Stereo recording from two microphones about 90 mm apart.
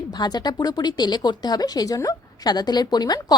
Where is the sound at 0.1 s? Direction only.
50° left (ahead or behind).